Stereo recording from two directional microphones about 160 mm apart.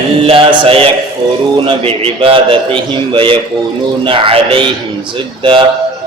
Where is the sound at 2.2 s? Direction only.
35° right (ahead or behind).